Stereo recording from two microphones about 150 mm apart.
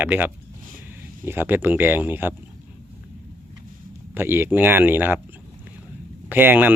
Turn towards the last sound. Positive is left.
turn(degrees=-10)  # may be behind; listen again after turning